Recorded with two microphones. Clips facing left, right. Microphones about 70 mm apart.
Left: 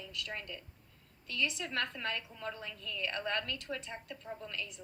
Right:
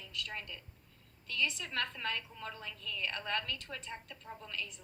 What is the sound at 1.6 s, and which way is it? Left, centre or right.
A woman's voice, left.